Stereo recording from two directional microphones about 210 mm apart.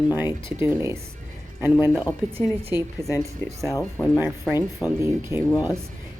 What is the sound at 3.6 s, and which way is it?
Speech, 10° left (ahead or behind).